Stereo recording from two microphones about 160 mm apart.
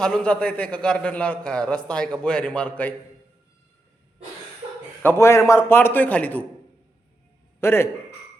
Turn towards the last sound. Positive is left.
turn(degrees=15)  # may be behind; listen again after turning